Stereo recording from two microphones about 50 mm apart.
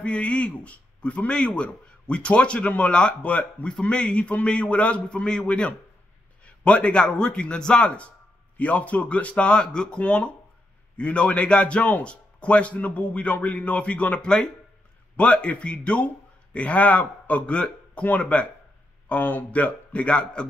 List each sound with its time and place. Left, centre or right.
0.0 s speech: left
9.5 s speech: centre